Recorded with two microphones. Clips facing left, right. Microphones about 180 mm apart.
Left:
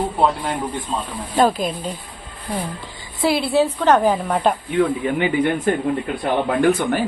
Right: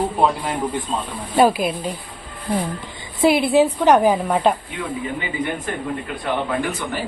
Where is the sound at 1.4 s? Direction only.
10° right (ahead or behind).